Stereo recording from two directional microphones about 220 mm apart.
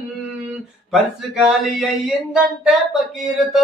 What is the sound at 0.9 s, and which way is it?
Speech, centre (ahead or behind).